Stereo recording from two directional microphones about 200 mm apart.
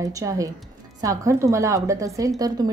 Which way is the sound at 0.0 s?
15° right (ahead or behind).